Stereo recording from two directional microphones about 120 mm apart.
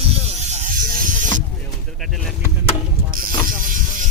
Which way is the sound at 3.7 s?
90° right.